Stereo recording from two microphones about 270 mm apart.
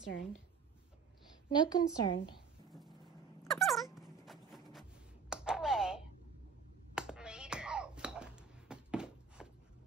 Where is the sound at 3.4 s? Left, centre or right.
Centre.